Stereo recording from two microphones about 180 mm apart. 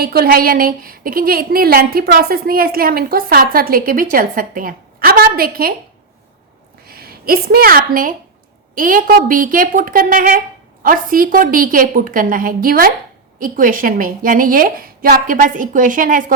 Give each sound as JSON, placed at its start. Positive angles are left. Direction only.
{"t": 0.0, "sound": "a woman's voice", "side_deg": -60}
{"t": 6.8, "sound": "a woman's voice", "side_deg": -55}